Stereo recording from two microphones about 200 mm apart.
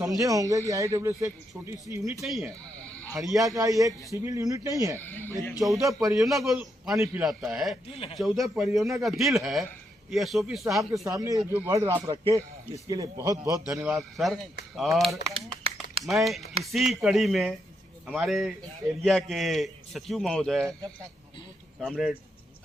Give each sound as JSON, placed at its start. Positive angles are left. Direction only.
{"t": 0.0, "sound": "a man's voice", "side_deg": -15}
{"t": 2.2, "sound": "speech", "side_deg": 0}
{"t": 3.3, "sound": "a man's voice", "side_deg": -15}
{"t": 5.5, "sound": "a man's voice", "side_deg": 0}
{"t": 5.8, "sound": "a man's voice", "side_deg": -15}
{"t": 6.1, "sound": "a man's voice", "side_deg": 0}
{"t": 7.9, "sound": "speech", "side_deg": 30}
{"t": 8.2, "sound": "a man's voice", "side_deg": 0}
{"t": 11.0, "sound": "a man's voice", "side_deg": -15}
{"t": 13.7, "sound": "a man's voice", "side_deg": -5}
{"t": 15.3, "sound": "run", "side_deg": -30}
{"t": 16.0, "sound": "a man's voice", "side_deg": 0}
{"t": 21.8, "sound": "a man's voice", "side_deg": 0}